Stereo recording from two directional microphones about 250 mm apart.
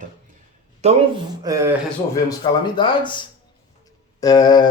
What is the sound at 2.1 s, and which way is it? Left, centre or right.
Speech, centre.